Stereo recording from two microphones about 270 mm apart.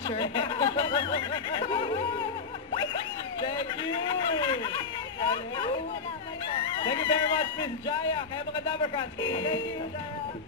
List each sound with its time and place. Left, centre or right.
0.0 s snicker: centre
2.7 s a sound: centre
6.8 s a man's voice: centre